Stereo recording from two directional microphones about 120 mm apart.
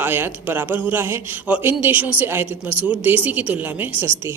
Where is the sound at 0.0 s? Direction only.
15° right (ahead or behind).